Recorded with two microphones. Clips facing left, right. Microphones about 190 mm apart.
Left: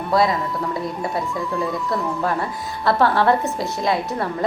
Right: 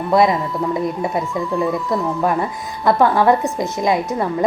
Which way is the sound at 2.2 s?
15° right (ahead or behind).